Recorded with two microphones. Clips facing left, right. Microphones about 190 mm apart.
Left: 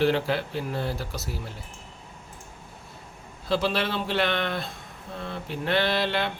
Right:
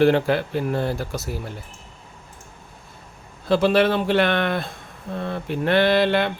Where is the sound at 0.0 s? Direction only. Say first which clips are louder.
Right 6 dB; 55° right (ahead or behind).